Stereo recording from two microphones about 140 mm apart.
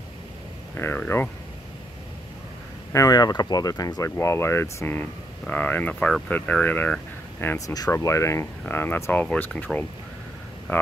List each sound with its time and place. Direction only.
0.7 s speech: 15° left (ahead or behind)
2.9 s speech: 25° left (ahead or behind); by 9.7 s 10° left (ahead or behind)
10.7 s speech: 10° left (ahead or behind)